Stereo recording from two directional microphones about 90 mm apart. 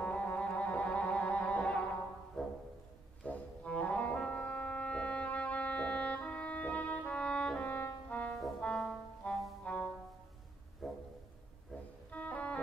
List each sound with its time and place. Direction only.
0.0 s music: 15° left (ahead or behind)
2.4 s music: centre (ahead or behind)
3.3 s brass instrument: 15° left (ahead or behind)
8.5 s music: 10° left (ahead or behind)
10.8 s a sound: centre (ahead or behind)
12.1 s organ: 15° left (ahead or behind)